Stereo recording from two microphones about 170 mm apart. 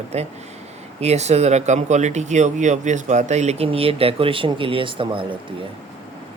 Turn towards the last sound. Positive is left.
turn(degrees=-30)  # may be behind; listen again after turning